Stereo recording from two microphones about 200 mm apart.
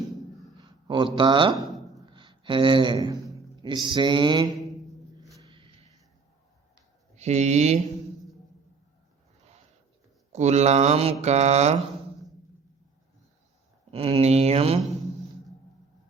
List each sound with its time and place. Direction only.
0.5 s speech: 20° right (ahead or behind)
5.4 s a sound: 25° right (ahead or behind)
7.2 s speech: 35° right (ahead or behind)
10.3 s speech: 35° right (ahead or behind)
13.9 s speech: 30° right (ahead or behind)